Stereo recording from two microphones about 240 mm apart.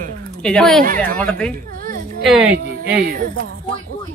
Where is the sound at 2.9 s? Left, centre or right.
Right.